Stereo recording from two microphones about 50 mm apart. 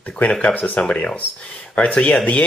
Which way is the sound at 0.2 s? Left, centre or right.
Left.